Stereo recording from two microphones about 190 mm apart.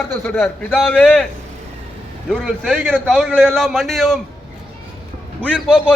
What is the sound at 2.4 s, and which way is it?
A man's voice, centre (ahead or behind).